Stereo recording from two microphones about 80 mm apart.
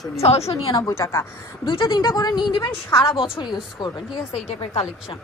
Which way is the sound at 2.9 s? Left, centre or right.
Left.